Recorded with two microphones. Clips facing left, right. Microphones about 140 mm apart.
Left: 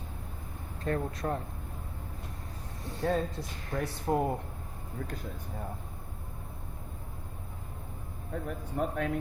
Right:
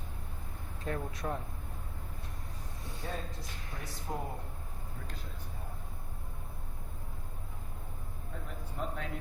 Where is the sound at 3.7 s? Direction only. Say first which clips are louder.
Left 11 dB; 60° left (ahead or behind).